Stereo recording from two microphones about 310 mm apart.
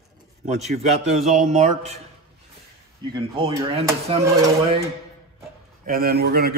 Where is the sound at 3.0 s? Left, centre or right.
Centre.